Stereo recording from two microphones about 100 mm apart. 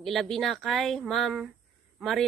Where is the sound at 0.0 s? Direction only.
Centre (ahead or behind).